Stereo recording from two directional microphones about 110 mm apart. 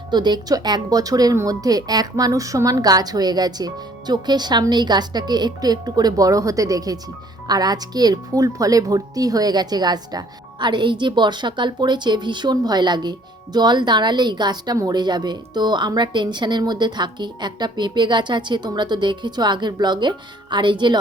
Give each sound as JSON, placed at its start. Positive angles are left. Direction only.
{"t": 0.1, "sound": "speech", "side_deg": -40}